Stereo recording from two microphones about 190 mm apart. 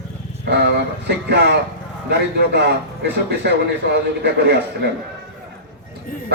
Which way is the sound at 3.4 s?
65° right (ahead or behind).